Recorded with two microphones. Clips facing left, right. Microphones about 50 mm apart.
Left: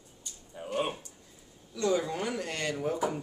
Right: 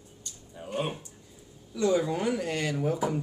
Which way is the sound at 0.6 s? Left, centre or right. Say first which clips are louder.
Left 1 dB; centre.